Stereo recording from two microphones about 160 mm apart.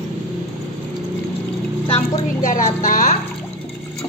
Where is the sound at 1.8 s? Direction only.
35° left (ahead or behind).